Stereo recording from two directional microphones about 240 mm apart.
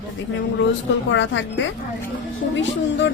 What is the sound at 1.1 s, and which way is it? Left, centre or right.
A woman's voice, left.